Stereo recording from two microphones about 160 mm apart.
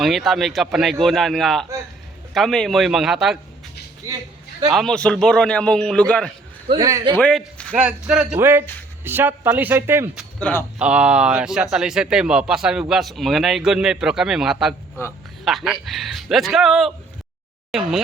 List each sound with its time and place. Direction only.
0.0 s a man's voice: centre (ahead or behind)
4.7 s a man's voice: centre (ahead or behind)
6.7 s a man's voice: 20° right (ahead or behind)
7.2 s a man's voice: 5° left (ahead or behind)
7.7 s speech: 5° right (ahead or behind)
10.4 s speech: 15° left (ahead or behind)
10.8 s a man's voice: 5° right (ahead or behind)